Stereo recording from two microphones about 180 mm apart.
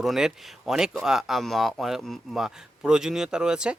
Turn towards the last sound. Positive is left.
turn(degrees=-5)  # may be behind; listen again after turning